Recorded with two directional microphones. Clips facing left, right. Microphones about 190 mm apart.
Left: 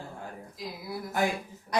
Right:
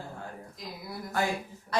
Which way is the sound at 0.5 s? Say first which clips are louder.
Left 5 dB; centre (ahead or behind).